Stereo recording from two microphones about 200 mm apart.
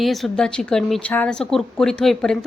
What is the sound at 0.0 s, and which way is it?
A woman's voice, centre (ahead or behind).